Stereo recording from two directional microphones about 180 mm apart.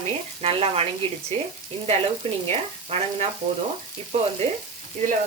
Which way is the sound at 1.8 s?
35° right (ahead or behind).